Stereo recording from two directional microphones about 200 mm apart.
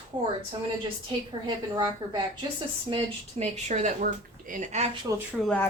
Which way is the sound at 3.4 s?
35° right (ahead or behind).